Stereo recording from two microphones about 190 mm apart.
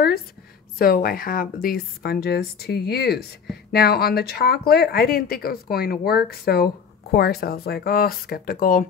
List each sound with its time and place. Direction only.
0.7 s speech: 50° left (ahead or behind)